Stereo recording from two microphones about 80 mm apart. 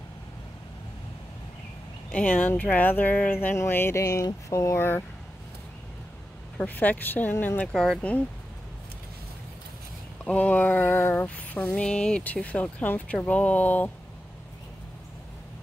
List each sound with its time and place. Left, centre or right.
2.0 s speech: centre
3.5 s a sound: left
4.0 s a sound: left
4.7 s speech: left
6.6 s speech: centre
7.6 s speech: centre
10.2 s speech: centre